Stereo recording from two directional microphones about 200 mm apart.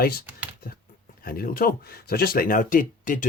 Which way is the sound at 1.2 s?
45° left (ahead or behind).